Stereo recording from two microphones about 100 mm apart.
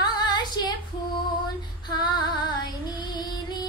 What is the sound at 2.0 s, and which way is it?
Music, 45° left (ahead or behind).